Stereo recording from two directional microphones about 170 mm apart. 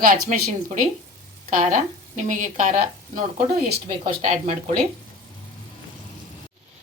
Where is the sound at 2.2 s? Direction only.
45° right (ahead or behind).